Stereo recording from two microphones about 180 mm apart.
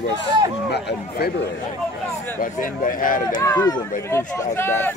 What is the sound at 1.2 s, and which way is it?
Speech, 60° left (ahead or behind).